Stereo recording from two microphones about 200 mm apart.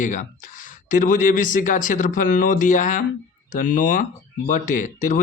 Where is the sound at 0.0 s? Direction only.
40° left (ahead or behind).